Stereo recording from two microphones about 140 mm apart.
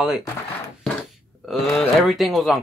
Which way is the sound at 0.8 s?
Centre (ahead or behind).